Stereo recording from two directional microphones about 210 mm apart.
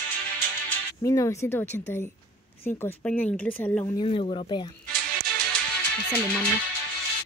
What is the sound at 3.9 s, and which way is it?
Speech, 25° left (ahead or behind).